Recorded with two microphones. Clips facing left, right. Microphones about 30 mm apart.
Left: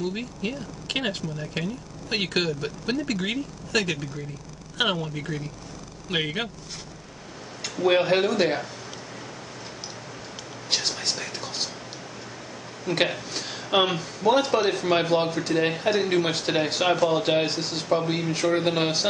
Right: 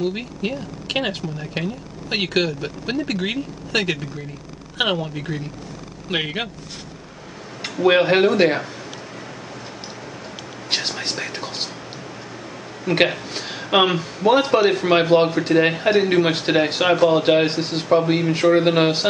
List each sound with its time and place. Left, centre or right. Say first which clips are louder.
0.1 s a man's voice: right 4 dB; right
7.7 s a man's voice: right 5 dB; right
10.7 s whispering: right 3 dB; right
12.8 s a man's voice: right 6 dB; right